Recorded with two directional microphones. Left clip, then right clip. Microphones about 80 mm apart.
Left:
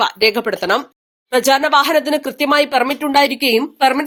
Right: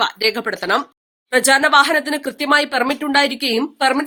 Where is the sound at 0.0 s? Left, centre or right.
Left.